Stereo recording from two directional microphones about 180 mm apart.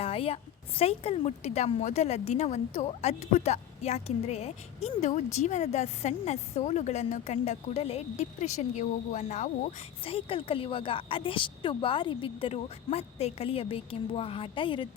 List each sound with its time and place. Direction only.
0.0 s a sound: 35° left (ahead or behind)
0.8 s speech: 35° left (ahead or behind)
10.0 s speech: 30° left (ahead or behind)